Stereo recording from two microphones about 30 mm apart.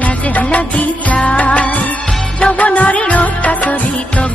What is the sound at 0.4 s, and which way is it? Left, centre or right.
Music, left.